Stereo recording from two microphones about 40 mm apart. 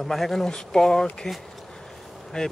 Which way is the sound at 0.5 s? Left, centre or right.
Centre.